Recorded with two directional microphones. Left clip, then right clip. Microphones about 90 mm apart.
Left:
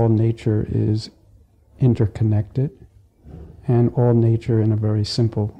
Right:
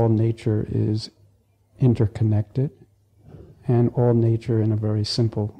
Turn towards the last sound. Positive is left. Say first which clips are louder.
# left 2 dB
turn(degrees=-20)  # may be behind; listen again after turning